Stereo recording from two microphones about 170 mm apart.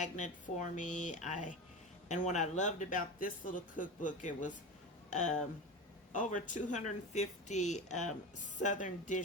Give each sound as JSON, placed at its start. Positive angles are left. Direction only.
{"t": 0.0, "sound": "speech", "side_deg": 45}